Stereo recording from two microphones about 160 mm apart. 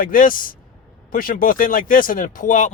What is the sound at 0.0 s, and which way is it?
A man's voice, 60° left (ahead or behind).